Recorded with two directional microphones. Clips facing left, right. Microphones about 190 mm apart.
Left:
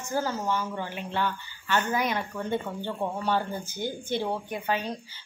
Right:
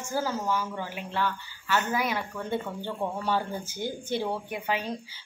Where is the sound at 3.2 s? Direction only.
10° right (ahead or behind).